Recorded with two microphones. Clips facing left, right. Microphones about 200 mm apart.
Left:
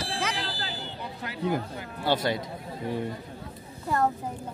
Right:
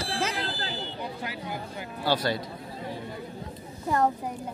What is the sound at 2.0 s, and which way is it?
Speech, 20° left (ahead or behind).